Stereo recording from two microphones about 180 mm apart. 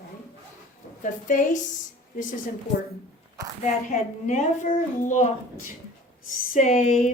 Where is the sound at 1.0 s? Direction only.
45° left (ahead or behind).